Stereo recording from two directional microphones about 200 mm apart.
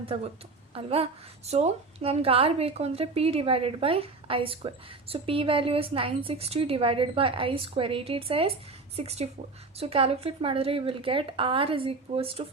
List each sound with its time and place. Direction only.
0.0 s a woman's voice: 30° right (ahead or behind)